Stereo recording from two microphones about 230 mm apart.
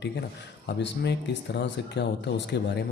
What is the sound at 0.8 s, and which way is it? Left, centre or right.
Speech, left.